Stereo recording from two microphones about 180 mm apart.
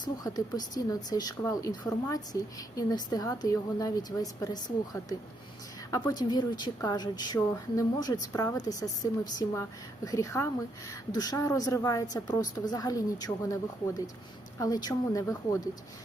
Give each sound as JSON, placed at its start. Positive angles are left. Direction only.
{"t": 0.0, "sound": "a woman's voice", "side_deg": 20}
{"t": 14.6, "sound": "a woman's voice", "side_deg": 20}